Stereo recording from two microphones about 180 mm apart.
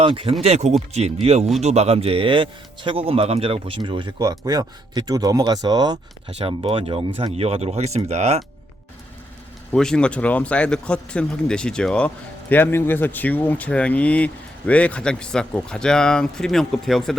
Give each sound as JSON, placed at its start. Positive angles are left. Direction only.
{"t": 0.0, "sound": "speech", "side_deg": -30}
{"t": 9.7, "sound": "speech", "side_deg": 5}